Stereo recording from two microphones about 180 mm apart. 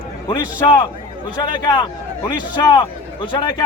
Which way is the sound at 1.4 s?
25° left (ahead or behind).